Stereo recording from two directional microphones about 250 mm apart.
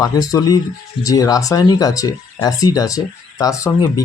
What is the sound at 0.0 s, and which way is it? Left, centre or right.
Speech, centre.